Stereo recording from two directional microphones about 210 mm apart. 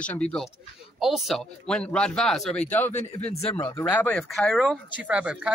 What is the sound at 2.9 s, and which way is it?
Speech, 30° left (ahead or behind).